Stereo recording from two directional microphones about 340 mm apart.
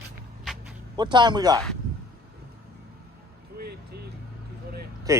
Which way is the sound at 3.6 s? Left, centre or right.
Right.